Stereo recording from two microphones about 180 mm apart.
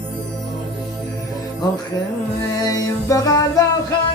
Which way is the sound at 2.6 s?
20° left (ahead or behind).